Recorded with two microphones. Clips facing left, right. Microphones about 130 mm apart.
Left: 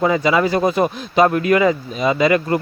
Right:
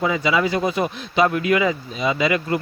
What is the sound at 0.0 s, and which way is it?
Speech, 45° left (ahead or behind).